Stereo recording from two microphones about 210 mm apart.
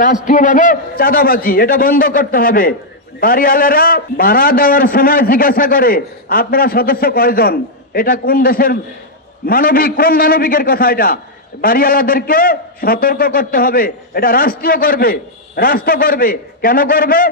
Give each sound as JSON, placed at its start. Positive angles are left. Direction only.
{"t": 0.0, "sound": "a man's voice", "side_deg": 40}